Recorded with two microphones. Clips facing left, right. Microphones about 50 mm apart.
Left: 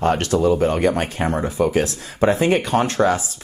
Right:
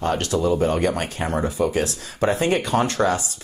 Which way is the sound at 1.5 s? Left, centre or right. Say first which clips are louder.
Left 3 dB; left.